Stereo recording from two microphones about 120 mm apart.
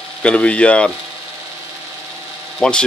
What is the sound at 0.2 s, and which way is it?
Speech, 10° left (ahead or behind).